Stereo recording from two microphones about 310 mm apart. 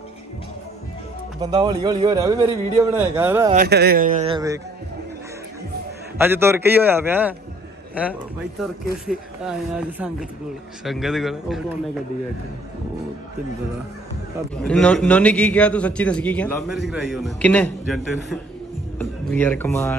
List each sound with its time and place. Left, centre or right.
1.4 s a man's voice: centre
3.5 s speech: right; by 4.6 s centre
6.1 s a man's voice: centre
14.6 s a man's voice: centre